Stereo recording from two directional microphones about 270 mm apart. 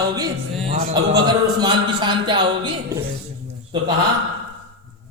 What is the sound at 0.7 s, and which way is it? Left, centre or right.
Speech, right.